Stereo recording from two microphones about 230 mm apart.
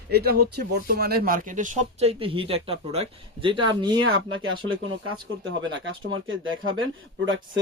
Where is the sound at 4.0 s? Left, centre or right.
Right.